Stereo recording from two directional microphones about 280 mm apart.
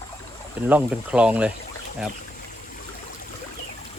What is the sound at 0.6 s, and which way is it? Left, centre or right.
Speech, centre.